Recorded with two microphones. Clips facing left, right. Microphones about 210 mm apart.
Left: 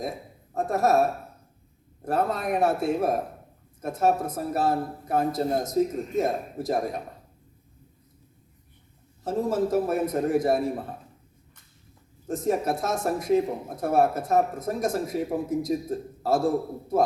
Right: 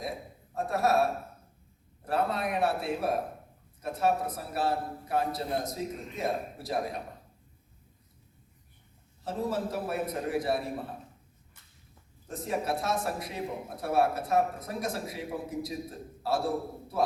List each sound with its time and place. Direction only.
0.5 s speech: 45° left (ahead or behind)
2.0 s speech: 45° left (ahead or behind)
9.2 s speech: 45° left (ahead or behind)
12.3 s speech: 45° left (ahead or behind)